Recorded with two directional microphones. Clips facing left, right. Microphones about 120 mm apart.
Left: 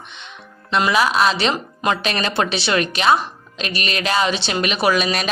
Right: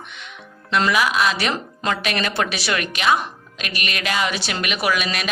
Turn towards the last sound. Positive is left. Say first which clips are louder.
# left 4 dB
turn(degrees=35)  # may be behind; listen again after turning